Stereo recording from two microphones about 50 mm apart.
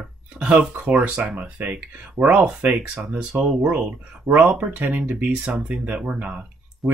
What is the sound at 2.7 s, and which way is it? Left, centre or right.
Speech, right.